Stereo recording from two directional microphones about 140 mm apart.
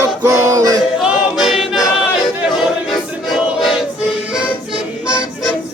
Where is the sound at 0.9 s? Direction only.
5° right (ahead or behind).